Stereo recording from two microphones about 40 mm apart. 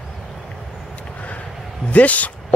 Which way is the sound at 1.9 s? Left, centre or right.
Left.